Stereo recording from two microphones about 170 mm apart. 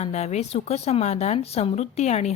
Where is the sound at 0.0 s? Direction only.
45° left (ahead or behind).